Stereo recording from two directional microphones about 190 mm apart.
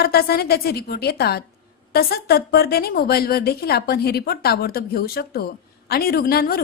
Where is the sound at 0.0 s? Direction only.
55° left (ahead or behind).